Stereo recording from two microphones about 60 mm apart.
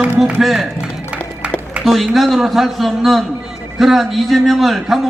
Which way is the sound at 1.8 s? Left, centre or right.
Centre.